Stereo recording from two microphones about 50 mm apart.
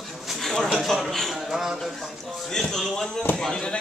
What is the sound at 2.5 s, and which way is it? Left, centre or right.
A man's voice, centre.